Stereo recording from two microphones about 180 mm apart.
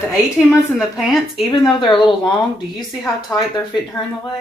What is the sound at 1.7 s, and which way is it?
Speech, 25° left (ahead or behind).